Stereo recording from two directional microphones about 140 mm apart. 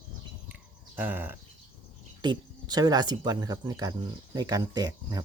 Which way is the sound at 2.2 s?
30° right (ahead or behind).